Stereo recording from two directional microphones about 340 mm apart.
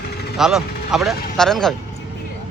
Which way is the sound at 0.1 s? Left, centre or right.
Left.